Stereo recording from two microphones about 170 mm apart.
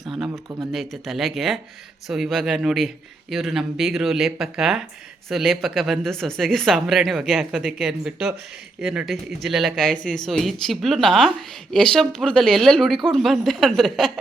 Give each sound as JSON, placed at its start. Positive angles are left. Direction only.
{"t": 0.0, "sound": "a sound", "side_deg": 0}
{"t": 0.3, "sound": "speech", "side_deg": -15}
{"t": 0.7, "sound": "speech", "side_deg": 0}